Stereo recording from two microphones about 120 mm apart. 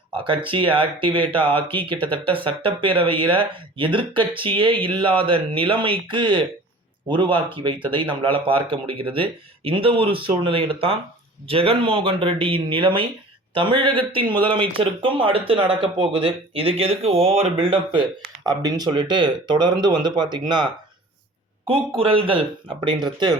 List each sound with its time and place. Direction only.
0.1 s speech: 45° right (ahead or behind)
18.4 s speech: 35° right (ahead or behind)
21.7 s speech: 50° right (ahead or behind)